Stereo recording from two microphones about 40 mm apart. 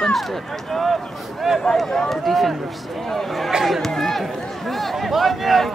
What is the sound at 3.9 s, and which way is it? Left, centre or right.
Speech, centre.